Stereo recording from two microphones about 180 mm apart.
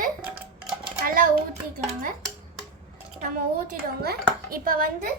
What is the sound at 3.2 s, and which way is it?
A woman's voice, 45° right (ahead or behind).